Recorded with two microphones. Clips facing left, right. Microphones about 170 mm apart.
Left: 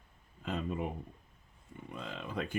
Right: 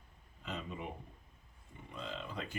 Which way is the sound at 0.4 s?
50° left (ahead or behind).